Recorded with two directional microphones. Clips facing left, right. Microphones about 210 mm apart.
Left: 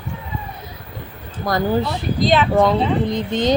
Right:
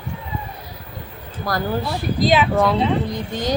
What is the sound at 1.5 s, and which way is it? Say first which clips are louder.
Speech: left 3 dB; 20° left (ahead or behind).